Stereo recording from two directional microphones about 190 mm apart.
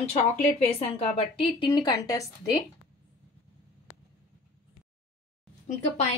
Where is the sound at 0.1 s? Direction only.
35° left (ahead or behind).